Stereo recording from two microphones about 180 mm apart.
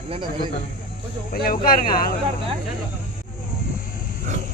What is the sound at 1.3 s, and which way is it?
Speech, 55° left (ahead or behind).